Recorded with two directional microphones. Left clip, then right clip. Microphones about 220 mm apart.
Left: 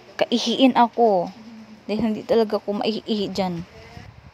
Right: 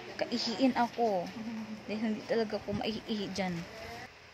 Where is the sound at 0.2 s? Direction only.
35° left (ahead or behind).